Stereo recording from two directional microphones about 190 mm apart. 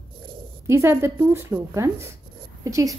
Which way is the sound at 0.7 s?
15° right (ahead or behind).